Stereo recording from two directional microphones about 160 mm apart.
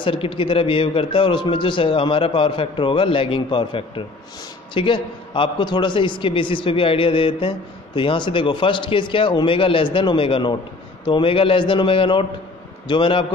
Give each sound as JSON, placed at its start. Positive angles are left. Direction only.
{"t": 0.0, "sound": "a man's voice", "side_deg": 35}